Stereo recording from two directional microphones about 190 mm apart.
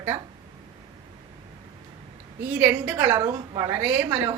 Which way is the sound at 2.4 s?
10° right (ahead or behind).